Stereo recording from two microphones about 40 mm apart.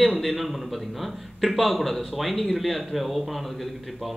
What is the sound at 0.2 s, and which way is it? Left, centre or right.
A man's voice, centre.